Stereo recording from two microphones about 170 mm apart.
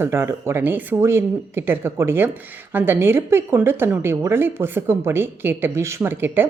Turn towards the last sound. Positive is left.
turn(degrees=-15)  # may be behind; listen again after turning